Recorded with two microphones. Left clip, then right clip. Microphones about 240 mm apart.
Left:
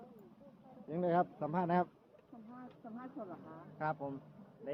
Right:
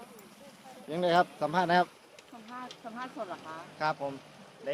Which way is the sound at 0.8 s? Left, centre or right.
Centre.